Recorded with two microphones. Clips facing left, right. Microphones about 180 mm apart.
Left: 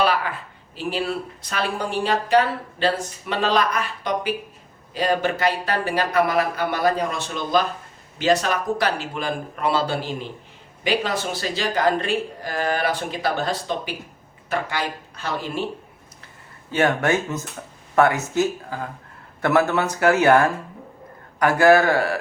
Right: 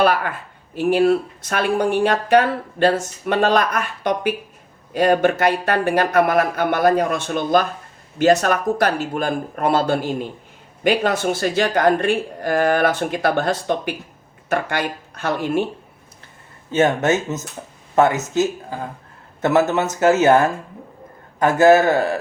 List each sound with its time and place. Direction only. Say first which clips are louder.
0.0 s speech: right 4 dB; 50° right (ahead or behind)
16.7 s speech: right 3 dB; 20° right (ahead or behind)